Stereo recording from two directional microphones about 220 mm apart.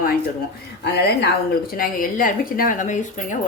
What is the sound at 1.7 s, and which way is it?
A woman's voice, 40° left (ahead or behind).